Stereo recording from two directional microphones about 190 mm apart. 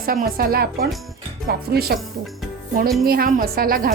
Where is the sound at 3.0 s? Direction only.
50° right (ahead or behind).